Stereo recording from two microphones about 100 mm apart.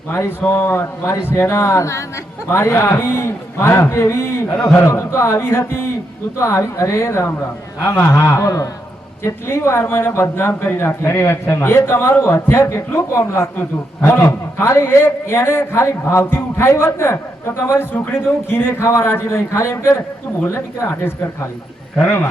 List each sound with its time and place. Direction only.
0.1 s a man's voice: 25° left (ahead or behind)